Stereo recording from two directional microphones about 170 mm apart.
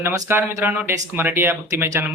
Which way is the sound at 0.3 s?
15° right (ahead or behind).